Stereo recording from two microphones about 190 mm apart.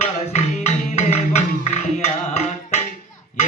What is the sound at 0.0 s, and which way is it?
Music, 35° left (ahead or behind).